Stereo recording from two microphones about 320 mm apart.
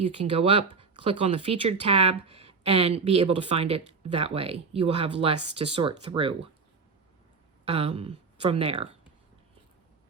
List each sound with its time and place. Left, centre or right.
0.0 s speech: centre
7.6 s speech: centre